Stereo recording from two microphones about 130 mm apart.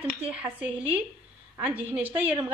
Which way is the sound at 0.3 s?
10° right (ahead or behind).